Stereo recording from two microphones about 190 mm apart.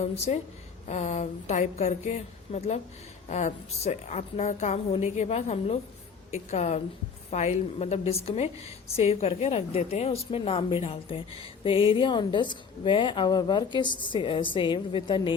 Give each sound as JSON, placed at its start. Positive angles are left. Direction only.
{"t": 0.0, "sound": "a woman's voice", "side_deg": 35}